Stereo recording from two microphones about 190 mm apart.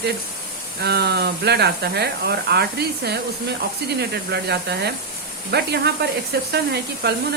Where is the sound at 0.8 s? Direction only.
60° right (ahead or behind).